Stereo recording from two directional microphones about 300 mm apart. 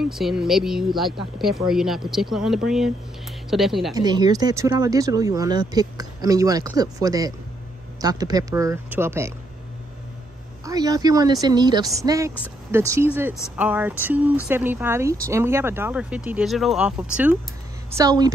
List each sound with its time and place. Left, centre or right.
0.1 s speech: centre
3.9 s speech: centre
10.6 s speech: centre